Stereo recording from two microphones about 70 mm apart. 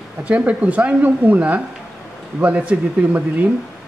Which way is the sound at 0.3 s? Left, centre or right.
Centre.